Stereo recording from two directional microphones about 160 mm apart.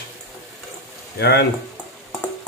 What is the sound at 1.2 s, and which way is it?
Speech, 90° left.